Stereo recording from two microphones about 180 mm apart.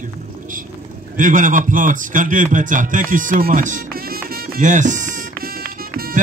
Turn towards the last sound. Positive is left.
turn(degrees=-55)  # may be behind; listen again after turning